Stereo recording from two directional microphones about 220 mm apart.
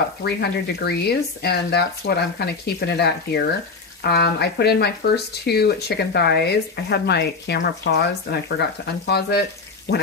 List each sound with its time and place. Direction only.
0.2 s speech: 45° left (ahead or behind)